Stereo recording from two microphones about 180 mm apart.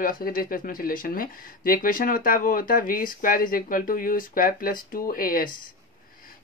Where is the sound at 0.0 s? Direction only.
50° left (ahead or behind).